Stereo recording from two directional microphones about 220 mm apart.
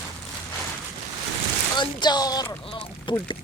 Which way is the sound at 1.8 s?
20° left (ahead or behind).